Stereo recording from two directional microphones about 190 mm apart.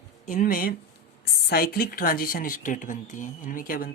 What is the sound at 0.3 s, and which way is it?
Speech, 50° left (ahead or behind).